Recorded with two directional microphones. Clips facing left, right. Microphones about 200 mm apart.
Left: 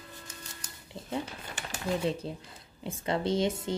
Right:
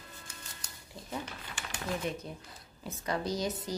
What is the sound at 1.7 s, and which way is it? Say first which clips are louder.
A woman's voice: left 5 dB; 30° left (ahead or behind).